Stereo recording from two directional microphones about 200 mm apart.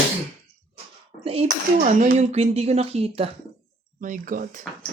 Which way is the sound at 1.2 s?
30° right (ahead or behind).